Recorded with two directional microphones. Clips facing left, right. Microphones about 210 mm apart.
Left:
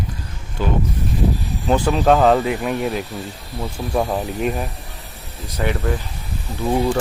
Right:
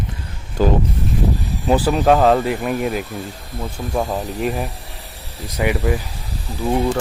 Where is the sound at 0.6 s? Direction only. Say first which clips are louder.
Right 5 dB; 40° right (ahead or behind).